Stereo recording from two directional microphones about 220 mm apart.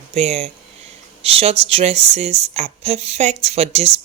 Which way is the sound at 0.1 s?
30° right (ahead or behind).